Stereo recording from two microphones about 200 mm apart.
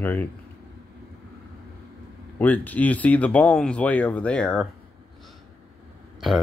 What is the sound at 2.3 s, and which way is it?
Speech, 10° left (ahead or behind).